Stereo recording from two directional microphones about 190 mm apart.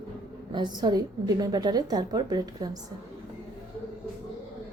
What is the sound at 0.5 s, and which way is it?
Speech, 25° right (ahead or behind).